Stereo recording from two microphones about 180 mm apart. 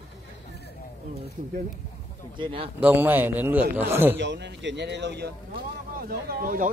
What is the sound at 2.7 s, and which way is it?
A man's voice, 10° right (ahead or behind).